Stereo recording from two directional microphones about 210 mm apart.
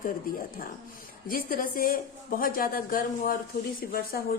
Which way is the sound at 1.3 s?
45° left (ahead or behind).